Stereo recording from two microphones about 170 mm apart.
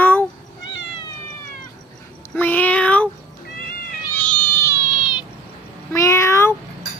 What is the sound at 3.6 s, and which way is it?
Cat, 60° left (ahead or behind).